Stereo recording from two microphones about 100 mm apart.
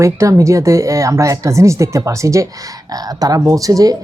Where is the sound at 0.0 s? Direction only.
30° right (ahead or behind).